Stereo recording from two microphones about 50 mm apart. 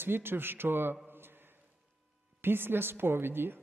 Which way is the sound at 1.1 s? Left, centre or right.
Right.